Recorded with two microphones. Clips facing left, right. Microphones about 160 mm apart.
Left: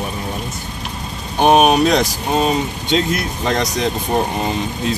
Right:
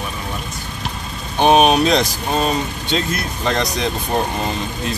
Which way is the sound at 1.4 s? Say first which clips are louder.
Left 1 dB; 10° left (ahead or behind).